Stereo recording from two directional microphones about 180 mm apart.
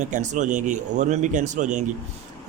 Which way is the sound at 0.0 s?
45° right (ahead or behind).